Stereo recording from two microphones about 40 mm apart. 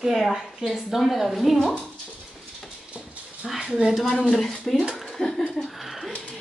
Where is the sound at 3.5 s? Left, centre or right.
Centre.